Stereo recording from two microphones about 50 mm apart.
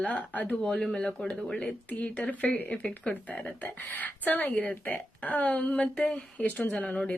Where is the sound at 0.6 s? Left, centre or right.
Centre.